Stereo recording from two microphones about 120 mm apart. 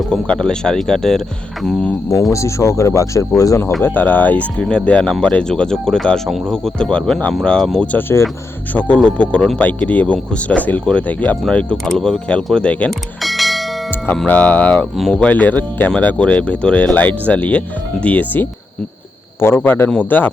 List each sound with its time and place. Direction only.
0.0 s speech: 5° left (ahead or behind)
2.3 s speech: 25° left (ahead or behind)
3.8 s speech: 15° left (ahead or behind)
7.9 s speech: 20° left (ahead or behind); by 13.7 s centre (ahead or behind)
14.1 s speech: 10° left (ahead or behind)